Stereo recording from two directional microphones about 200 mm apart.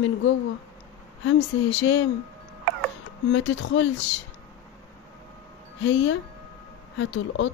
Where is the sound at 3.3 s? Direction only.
70° left (ahead or behind).